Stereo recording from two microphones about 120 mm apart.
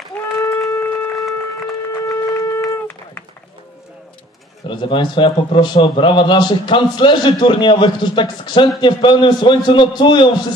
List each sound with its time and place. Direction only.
0.4 s a sound: 25° left (ahead or behind)
1.9 s shofar: 25° left (ahead or behind)
4.6 s a man's voice: 45° left (ahead or behind)